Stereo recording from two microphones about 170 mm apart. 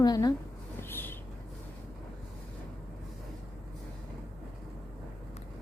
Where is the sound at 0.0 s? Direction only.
20° left (ahead or behind).